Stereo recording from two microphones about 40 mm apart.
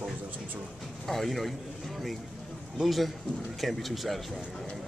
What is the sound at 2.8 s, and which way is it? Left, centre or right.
Speech, centre.